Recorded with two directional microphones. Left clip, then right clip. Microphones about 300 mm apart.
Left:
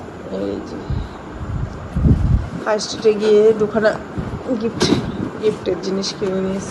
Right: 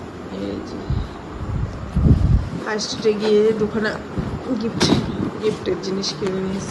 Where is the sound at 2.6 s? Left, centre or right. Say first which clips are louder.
Left 4 dB; centre.